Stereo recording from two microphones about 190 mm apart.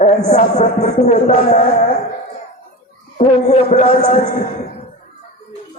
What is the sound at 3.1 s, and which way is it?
Speech, 35° left (ahead or behind).